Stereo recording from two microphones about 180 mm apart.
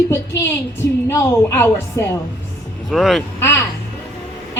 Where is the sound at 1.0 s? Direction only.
15° left (ahead or behind).